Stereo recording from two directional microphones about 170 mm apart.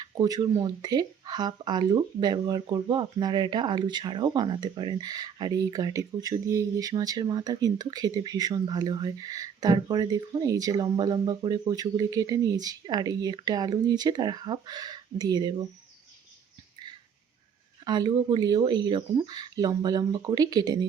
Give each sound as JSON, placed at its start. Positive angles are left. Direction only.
{"t": 0.0, "sound": "speech", "side_deg": -25}
{"t": 17.8, "sound": "speech", "side_deg": -25}